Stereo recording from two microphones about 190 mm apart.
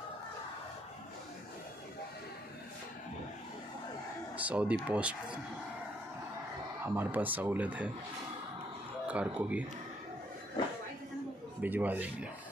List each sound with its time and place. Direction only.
4.4 s speech: 5° right (ahead or behind)
6.8 s speech: 10° right (ahead or behind)
9.0 s speech: 5° right (ahead or behind)
11.6 s speech: 10° right (ahead or behind)